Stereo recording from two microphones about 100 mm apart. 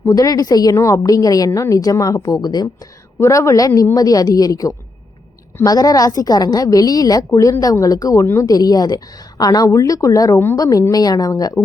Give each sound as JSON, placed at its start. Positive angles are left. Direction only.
{"t": 0.2, "sound": "a woman's voice", "side_deg": 40}
{"t": 3.2, "sound": "a woman's voice", "side_deg": 30}
{"t": 7.3, "sound": "a woman's voice", "side_deg": 30}